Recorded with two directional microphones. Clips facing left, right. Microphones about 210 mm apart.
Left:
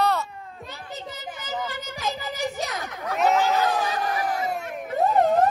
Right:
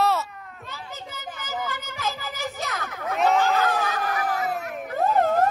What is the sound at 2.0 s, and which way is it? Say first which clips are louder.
Music: left 3 dB; 15° left (ahead or behind).